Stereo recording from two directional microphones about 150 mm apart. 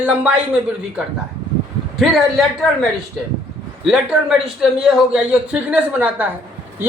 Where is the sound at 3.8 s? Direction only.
5° right (ahead or behind).